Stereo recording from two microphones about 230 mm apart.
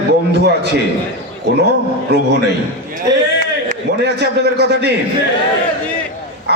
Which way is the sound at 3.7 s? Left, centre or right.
Right.